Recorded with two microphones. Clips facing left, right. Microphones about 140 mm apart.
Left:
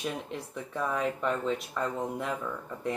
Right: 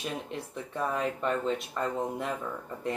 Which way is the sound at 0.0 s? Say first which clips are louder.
Left 1 dB; centre (ahead or behind).